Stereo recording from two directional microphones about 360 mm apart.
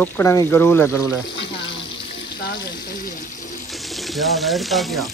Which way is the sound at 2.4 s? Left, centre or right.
Left.